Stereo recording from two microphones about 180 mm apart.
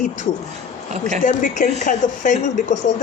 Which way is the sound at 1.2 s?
45° left (ahead or behind).